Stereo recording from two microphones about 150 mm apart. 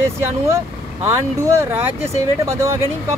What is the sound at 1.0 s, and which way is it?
Speech, 15° right (ahead or behind).